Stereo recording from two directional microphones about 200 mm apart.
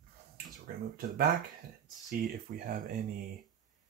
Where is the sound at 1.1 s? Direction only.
45° right (ahead or behind).